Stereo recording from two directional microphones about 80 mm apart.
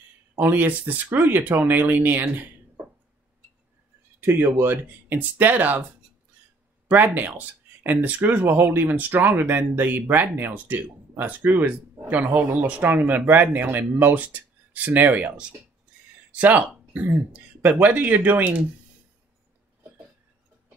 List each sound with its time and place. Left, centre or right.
0.4 s speech: right
4.3 s speech: right
6.9 s speech: right
16.3 s a sound: centre
17.3 s speech: centre